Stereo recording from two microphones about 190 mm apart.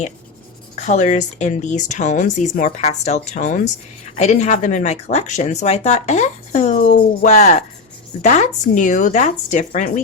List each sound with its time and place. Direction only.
0.8 s speech: 40° left (ahead or behind)